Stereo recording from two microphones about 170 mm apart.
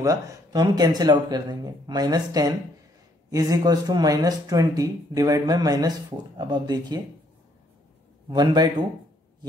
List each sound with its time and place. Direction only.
0.0 s speech: 20° right (ahead or behind)
8.3 s speech: 25° right (ahead or behind)